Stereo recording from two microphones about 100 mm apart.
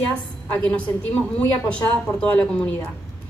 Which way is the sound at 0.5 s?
10° left (ahead or behind).